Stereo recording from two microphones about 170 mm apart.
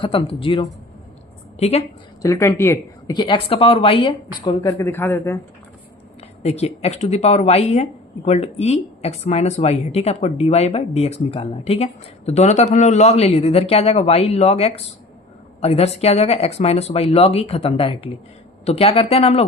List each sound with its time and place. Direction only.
0.0 s a woman's voice: 30° left (ahead or behind)
2.2 s speech: 20° left (ahead or behind)
3.2 s speech: 30° left (ahead or behind); by 5.4 s 15° left (ahead or behind)
6.4 s speech: 40° left (ahead or behind)